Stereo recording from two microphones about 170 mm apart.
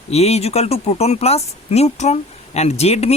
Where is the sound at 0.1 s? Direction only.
40° left (ahead or behind).